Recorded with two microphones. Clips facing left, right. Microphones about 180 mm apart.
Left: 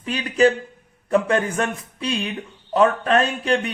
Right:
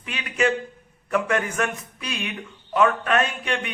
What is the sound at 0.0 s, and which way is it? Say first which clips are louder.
A man's voice: left 6 dB; 35° left (ahead or behind).